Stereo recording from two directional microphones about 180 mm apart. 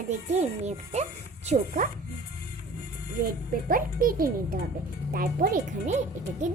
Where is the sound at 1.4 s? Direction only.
45° right (ahead or behind).